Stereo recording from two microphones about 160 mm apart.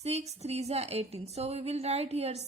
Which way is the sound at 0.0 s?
40° right (ahead or behind).